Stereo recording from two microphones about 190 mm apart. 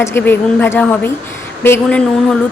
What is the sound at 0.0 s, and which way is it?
A woman's voice, 10° left (ahead or behind).